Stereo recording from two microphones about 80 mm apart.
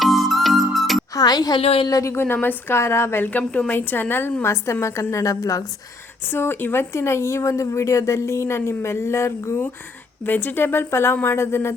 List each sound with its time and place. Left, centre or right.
0.0 s music: centre
1.1 s a woman's voice: left
1.9 s speech: left
2.1 s speech: left
3.2 s speech: centre; by 5.6 s left
6.2 s speech: left